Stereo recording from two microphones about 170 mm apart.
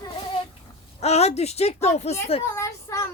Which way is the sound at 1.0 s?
40° left (ahead or behind).